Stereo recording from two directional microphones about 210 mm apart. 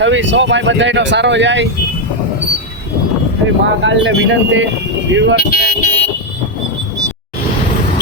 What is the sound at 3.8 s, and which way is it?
Speech, 60° right (ahead or behind).